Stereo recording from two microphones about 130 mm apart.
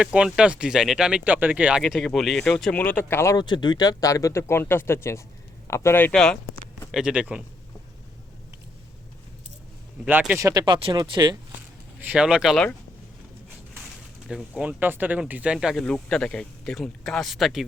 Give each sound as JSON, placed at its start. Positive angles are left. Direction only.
{"t": 0.0, "sound": "speech", "side_deg": -5}
{"t": 1.8, "sound": "speech", "side_deg": 0}
{"t": 3.3, "sound": "speech", "side_deg": 35}
{"t": 6.9, "sound": "speech", "side_deg": -5}
{"t": 10.1, "sound": "speech", "side_deg": -15}
{"t": 11.9, "sound": "speech", "side_deg": -10}
{"t": 14.3, "sound": "speech", "side_deg": -5}